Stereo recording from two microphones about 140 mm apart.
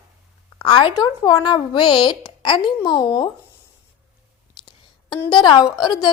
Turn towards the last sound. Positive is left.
turn(degrees=30)  # may be behind; listen again after turning